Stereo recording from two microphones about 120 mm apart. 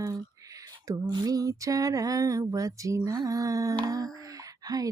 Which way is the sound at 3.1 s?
30° right (ahead or behind).